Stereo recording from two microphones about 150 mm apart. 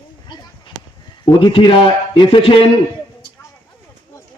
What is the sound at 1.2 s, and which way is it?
A man's voice, 30° left (ahead or behind).